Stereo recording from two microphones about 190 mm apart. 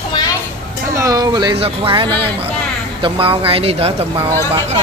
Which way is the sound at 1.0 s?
20° right (ahead or behind).